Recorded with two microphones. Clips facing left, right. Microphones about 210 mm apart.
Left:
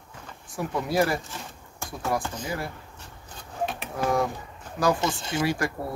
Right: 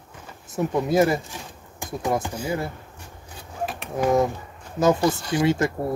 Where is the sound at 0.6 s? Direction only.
20° right (ahead or behind).